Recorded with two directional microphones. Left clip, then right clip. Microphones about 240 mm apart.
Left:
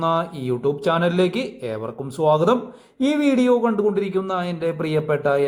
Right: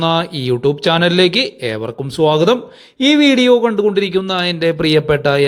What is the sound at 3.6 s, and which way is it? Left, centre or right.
A man's voice, right.